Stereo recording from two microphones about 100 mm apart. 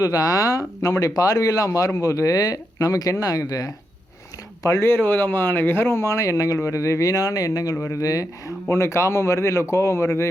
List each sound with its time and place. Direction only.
0.0 s a man's voice: 40° left (ahead or behind)